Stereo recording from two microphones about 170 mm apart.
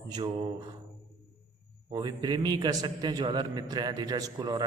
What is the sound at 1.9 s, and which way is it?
A man's voice, 25° right (ahead or behind).